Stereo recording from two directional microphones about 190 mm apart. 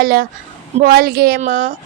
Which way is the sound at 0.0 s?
50° right (ahead or behind).